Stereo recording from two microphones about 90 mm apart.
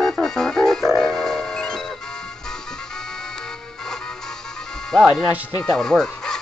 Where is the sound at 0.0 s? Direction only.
5° left (ahead or behind).